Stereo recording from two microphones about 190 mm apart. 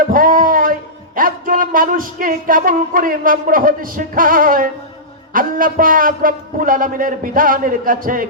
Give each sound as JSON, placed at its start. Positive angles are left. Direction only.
{"t": 0.0, "sound": "a man's voice", "side_deg": -45}